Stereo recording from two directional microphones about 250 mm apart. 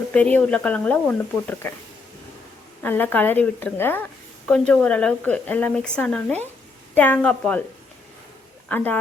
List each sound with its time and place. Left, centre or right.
0.1 s a woman's voice: centre
2.8 s a woman's voice: centre
8.7 s speech: centre